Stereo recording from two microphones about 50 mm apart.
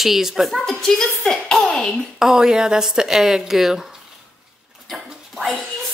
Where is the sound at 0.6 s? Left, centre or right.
Centre.